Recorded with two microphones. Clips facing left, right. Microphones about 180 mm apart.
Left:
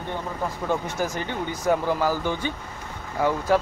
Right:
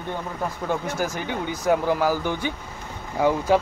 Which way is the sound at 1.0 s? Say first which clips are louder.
Right 1 dB; 5° right (ahead or behind).